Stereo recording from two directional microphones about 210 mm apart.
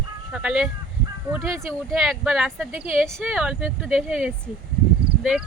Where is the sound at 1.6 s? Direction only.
Centre (ahead or behind).